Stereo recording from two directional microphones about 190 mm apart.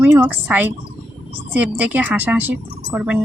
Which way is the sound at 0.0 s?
10° right (ahead or behind).